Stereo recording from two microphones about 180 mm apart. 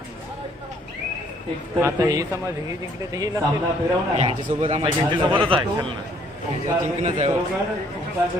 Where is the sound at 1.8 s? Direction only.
20° right (ahead or behind).